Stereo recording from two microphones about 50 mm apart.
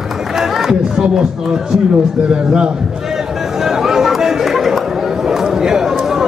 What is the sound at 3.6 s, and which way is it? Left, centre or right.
Chatter, centre.